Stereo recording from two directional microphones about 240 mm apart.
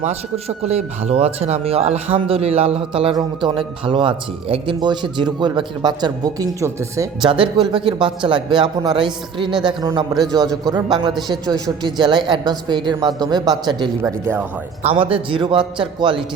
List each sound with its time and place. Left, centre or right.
0.0 s a woman's voice: right; by 14.4 s centre
14.8 s speech: right